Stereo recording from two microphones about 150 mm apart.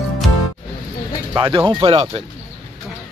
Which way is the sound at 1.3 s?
35° right (ahead or behind).